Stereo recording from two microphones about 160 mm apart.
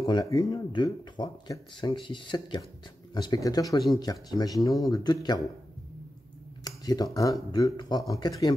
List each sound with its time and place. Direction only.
0.0 s speech: 25° left (ahead or behind)
6.6 s speech: 25° left (ahead or behind)